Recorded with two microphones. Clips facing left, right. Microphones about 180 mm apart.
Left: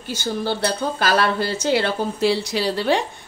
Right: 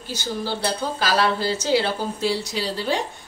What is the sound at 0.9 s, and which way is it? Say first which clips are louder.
Speech: even; 55° left (ahead or behind).